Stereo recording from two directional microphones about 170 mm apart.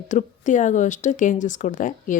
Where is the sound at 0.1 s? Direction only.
45° left (ahead or behind).